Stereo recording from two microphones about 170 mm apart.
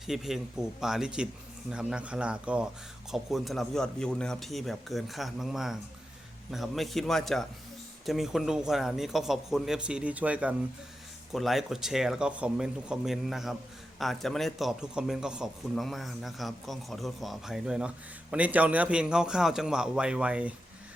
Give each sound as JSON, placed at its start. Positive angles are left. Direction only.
{"t": 0.0, "sound": "a man's voice", "side_deg": 0}